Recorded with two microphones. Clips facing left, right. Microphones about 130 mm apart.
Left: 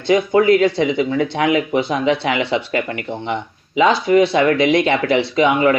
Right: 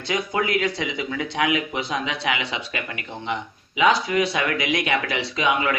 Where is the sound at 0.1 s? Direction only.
25° left (ahead or behind).